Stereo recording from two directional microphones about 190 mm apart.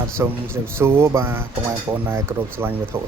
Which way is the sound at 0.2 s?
15° right (ahead or behind).